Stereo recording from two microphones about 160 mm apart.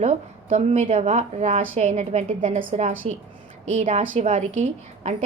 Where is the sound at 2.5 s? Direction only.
50° right (ahead or behind).